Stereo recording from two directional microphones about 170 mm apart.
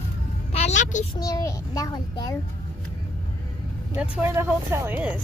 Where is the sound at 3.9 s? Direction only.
10° right (ahead or behind).